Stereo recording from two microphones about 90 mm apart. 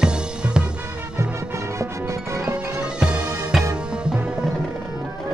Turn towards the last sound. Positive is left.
turn(degrees=-5)  # may be behind; listen again after turning